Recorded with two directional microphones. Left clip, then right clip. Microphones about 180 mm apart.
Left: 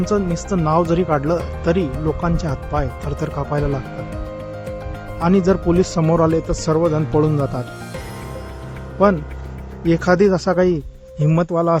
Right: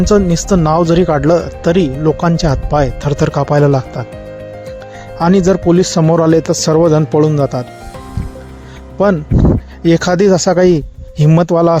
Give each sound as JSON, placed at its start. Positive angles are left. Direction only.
{"t": 0.0, "sound": "speech", "side_deg": -35}
{"t": 5.2, "sound": "speech", "side_deg": -30}
{"t": 9.8, "sound": "speech", "side_deg": -30}
{"t": 11.2, "sound": "speech", "side_deg": -35}